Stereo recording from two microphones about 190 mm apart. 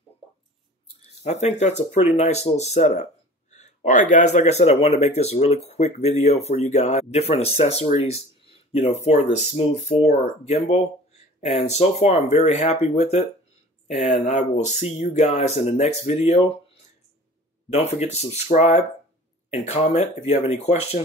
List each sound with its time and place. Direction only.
1.2 s speech: 35° left (ahead or behind)
17.6 s speech: 35° left (ahead or behind)